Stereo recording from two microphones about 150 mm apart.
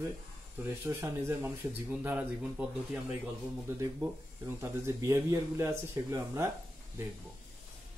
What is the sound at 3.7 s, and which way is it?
Speech, 15° right (ahead or behind).